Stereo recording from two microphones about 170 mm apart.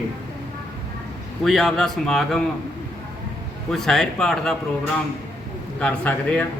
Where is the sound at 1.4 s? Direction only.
Centre (ahead or behind).